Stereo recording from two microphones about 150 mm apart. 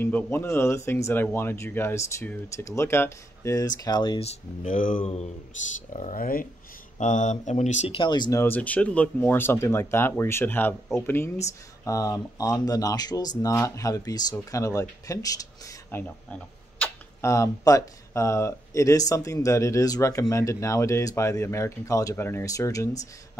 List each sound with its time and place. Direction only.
0.0 s speech: 15° left (ahead or behind); by 4.3 s 30° left (ahead or behind)
4.3 s speech: 60° left (ahead or behind)
5.0 s speech: 45° left (ahead or behind)
5.9 s speech: 65° left (ahead or behind)
7.0 s speech: 55° left (ahead or behind)
8.0 s speech: 30° left (ahead or behind)
8.4 s speech: 10° left (ahead or behind)
16.0 s speech: 10° left (ahead or behind)